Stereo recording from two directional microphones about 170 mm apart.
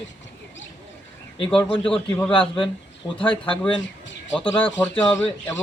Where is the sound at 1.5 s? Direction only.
5° left (ahead or behind).